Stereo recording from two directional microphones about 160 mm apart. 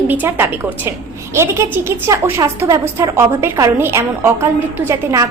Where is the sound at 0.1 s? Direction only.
10° right (ahead or behind).